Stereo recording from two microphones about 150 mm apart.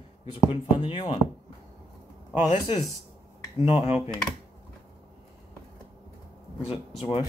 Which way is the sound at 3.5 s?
40° left (ahead or behind).